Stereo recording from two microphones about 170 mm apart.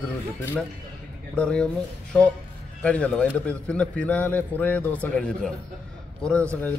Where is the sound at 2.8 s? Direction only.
5° left (ahead or behind).